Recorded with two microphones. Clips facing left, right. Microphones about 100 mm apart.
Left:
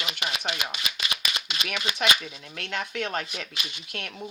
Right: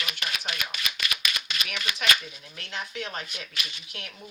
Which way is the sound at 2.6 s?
65° left (ahead or behind).